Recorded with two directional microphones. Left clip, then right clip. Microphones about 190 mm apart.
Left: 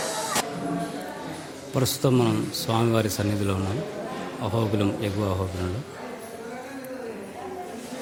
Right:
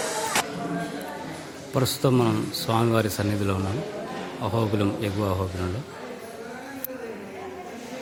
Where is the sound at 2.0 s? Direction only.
5° left (ahead or behind).